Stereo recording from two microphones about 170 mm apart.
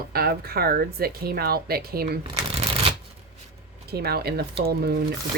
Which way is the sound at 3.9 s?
65° right (ahead or behind).